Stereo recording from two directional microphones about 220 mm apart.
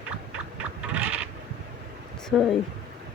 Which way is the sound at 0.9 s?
5° right (ahead or behind).